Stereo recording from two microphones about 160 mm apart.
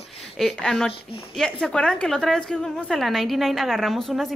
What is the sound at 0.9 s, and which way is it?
Speech, 35° left (ahead or behind).